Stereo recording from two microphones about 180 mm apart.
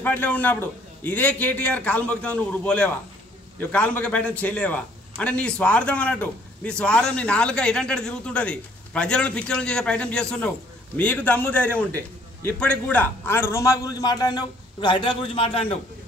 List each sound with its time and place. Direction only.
0.0 s a man's voice: 10° left (ahead or behind); by 15.8 s 30° left (ahead or behind)